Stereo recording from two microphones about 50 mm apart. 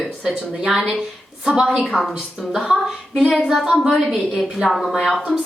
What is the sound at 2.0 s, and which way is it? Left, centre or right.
Speech, centre.